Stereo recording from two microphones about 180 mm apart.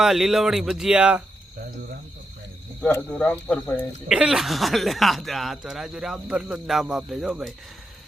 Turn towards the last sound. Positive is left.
turn(degrees=0)  # may be behind; listen again after turning